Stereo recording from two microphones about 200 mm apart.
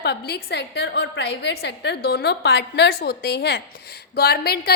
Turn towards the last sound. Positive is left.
turn(degrees=50)  # may be behind; listen again after turning